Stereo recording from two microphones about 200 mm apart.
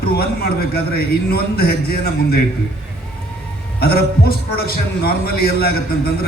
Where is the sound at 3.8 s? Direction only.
50° left (ahead or behind).